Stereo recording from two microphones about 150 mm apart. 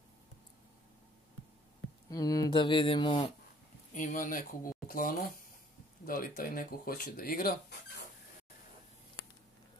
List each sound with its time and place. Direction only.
2.0 s speech: 25° left (ahead or behind)
3.9 s speech: 60° left (ahead or behind)